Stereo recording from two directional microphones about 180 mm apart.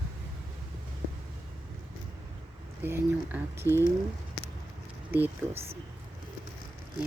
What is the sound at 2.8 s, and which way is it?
Speech, 10° right (ahead or behind).